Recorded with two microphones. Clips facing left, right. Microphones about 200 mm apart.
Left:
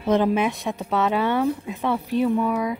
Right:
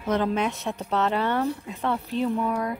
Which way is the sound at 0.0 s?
15° left (ahead or behind).